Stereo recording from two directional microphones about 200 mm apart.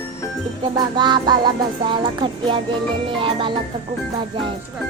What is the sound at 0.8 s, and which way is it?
Music, 20° right (ahead or behind).